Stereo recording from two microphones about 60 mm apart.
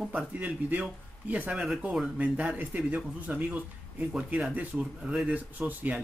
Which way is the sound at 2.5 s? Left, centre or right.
Right.